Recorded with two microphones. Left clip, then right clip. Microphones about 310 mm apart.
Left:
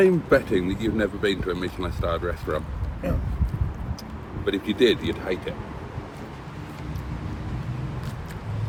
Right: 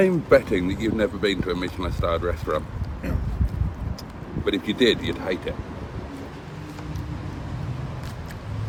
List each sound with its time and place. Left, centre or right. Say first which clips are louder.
0.0 s speech: right 1 dB; centre
4.4 s speech: even; centre